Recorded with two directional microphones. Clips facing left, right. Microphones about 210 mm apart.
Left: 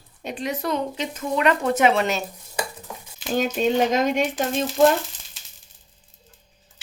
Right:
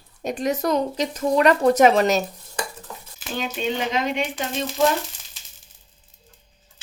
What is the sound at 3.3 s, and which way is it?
Speech, 45° left (ahead or behind).